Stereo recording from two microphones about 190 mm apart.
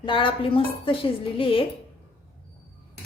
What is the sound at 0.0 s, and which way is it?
A woman's voice, 25° left (ahead or behind).